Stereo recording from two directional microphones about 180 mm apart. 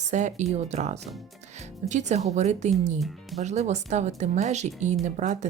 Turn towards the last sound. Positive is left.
turn(degrees=-40)  # may be behind; listen again after turning